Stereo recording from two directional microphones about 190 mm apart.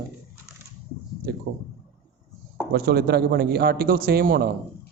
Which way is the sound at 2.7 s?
55° right (ahead or behind).